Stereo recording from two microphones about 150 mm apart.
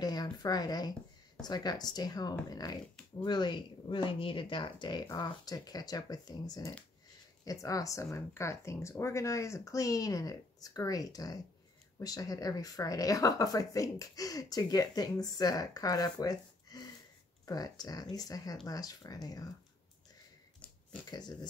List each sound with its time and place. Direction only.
0.0 s speech: 25° left (ahead or behind)
21.1 s speech: 30° left (ahead or behind)